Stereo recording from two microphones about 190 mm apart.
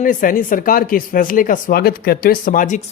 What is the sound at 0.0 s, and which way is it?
Speech, 45° left (ahead or behind).